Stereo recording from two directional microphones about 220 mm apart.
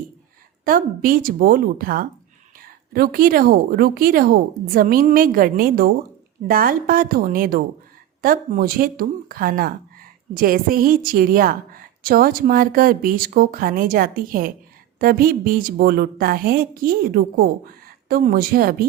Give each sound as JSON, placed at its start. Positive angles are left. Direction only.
{"t": 0.6, "sound": "a woman's voice", "side_deg": -40}